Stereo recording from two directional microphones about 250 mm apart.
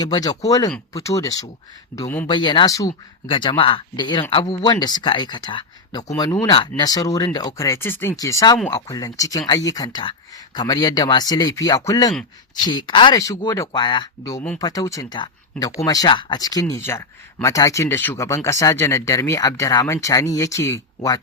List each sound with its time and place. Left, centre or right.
0.0 s speech: centre